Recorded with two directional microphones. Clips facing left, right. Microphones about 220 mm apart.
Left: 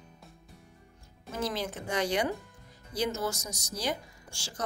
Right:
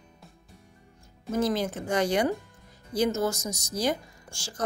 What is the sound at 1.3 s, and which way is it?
A woman's voice, 45° right (ahead or behind).